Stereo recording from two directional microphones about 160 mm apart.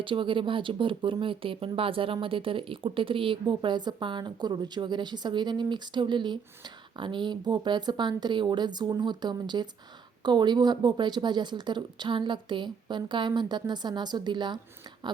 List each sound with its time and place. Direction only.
0.0 s speech: 30° right (ahead or behind)